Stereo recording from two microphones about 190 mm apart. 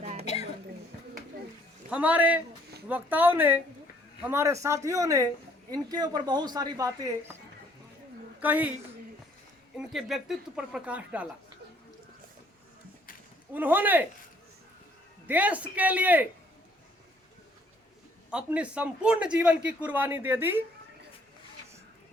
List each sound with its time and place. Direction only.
0.0 s a sound: 35° right (ahead or behind)
1.9 s a man's voice: 10° right (ahead or behind)
8.4 s speech: 10° right (ahead or behind)
9.7 s speech: centre (ahead or behind)
13.5 s speech: 10° right (ahead or behind)
15.3 s speech: 10° right (ahead or behind)
18.3 s speech: 5° right (ahead or behind)